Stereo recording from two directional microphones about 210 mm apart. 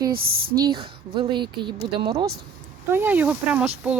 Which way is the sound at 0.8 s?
25° right (ahead or behind).